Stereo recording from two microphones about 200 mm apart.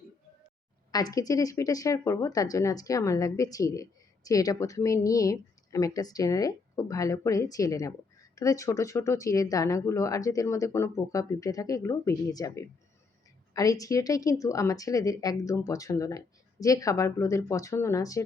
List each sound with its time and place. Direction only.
0.9 s speech: 20° left (ahead or behind)